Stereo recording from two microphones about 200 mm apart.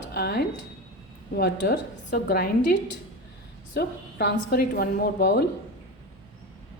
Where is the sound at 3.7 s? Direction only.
55° left (ahead or behind).